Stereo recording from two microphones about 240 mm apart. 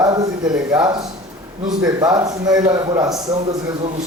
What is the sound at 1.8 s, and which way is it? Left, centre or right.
Speech, centre.